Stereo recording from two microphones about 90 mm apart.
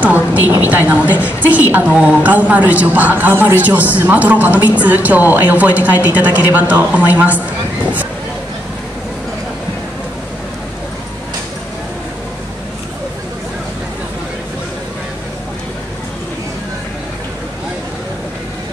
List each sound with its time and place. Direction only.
0.0 s a woman's voice: 20° right (ahead or behind)